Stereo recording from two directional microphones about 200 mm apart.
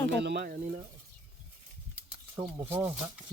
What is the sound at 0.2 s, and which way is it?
Speech, 55° right (ahead or behind).